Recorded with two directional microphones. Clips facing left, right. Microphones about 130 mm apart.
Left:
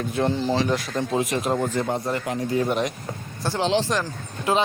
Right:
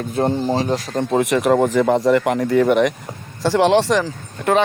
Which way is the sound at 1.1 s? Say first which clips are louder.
Right 9 dB; 65° right (ahead or behind).